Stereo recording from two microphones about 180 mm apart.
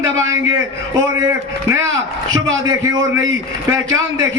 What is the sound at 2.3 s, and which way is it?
Speech, 90° right.